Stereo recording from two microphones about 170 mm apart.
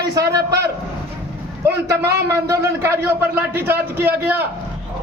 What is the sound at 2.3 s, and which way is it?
A man's voice, 15° right (ahead or behind).